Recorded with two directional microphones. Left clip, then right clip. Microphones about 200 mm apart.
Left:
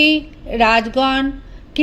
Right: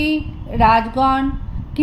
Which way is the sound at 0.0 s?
30° left (ahead or behind).